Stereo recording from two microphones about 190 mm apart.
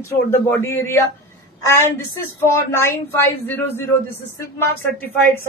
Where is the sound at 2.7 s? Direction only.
10° left (ahead or behind).